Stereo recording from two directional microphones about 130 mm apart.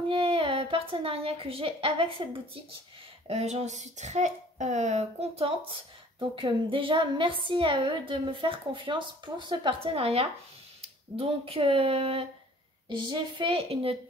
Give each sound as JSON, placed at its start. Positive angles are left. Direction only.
{"t": 0.1, "sound": "speech", "side_deg": -45}
{"t": 3.3, "sound": "a woman's voice", "side_deg": -55}
{"t": 12.8, "sound": "a woman's voice", "side_deg": -35}